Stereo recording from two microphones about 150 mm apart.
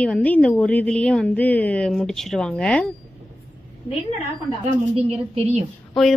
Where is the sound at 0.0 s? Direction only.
10° left (ahead or behind).